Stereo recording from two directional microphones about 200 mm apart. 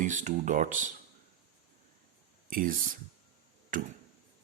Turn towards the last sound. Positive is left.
turn(degrees=-40)  # may be behind; listen again after turning